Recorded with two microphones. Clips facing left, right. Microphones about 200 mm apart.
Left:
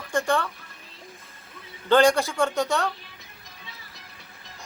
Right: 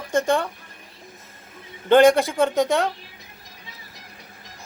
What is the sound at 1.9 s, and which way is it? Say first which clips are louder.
Speech: right 5 dB; 20° right (ahead or behind).